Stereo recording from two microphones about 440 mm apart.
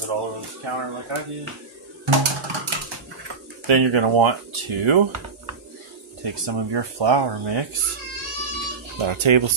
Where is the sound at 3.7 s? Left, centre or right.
Right.